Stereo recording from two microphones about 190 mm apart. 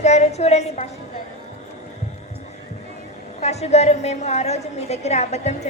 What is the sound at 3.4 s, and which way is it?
A woman's voice, 35° left (ahead or behind).